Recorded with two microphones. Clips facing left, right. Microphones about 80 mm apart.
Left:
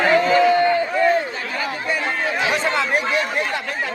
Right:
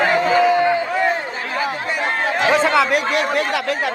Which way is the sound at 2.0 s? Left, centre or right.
Right.